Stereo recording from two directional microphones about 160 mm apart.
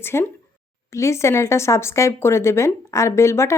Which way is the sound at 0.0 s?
15° left (ahead or behind).